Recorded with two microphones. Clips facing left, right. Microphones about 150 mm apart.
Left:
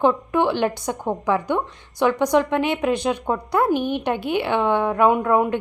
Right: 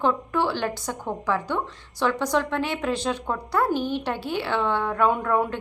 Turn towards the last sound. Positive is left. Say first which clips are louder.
# left 5 dB
turn(degrees=15)  # may be behind; listen again after turning